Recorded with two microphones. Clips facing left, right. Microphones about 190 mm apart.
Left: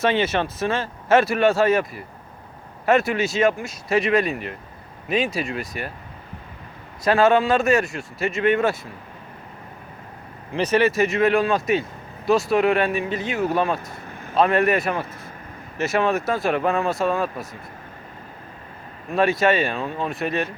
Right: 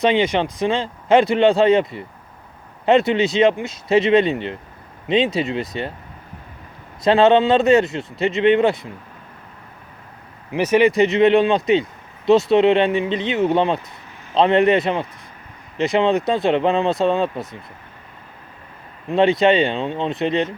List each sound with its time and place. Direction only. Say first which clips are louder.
0.0 s speech: right 3 dB; 15° right (ahead or behind)
7.0 s speech: right 4 dB; 20° right (ahead or behind)
10.5 s speech: right 4 dB; 10° right (ahead or behind)
19.1 s speech: right 4 dB; 20° right (ahead or behind)